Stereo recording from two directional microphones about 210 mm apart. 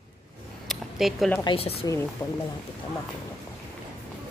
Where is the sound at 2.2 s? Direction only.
10° left (ahead or behind).